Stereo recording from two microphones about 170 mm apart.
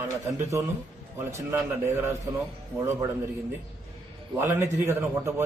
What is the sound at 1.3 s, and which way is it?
A man's voice, 15° right (ahead or behind).